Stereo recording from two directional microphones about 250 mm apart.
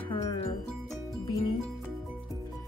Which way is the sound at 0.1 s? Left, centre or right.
Centre.